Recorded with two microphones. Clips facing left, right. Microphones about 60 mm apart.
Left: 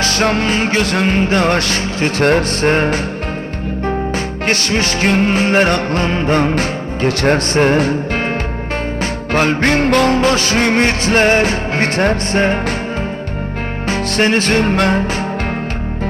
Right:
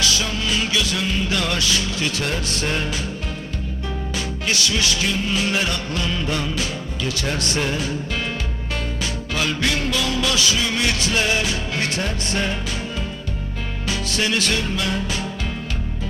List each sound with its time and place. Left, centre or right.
0.0 s music: left
4.4 s music: left
9.3 s music: left
13.8 s music: left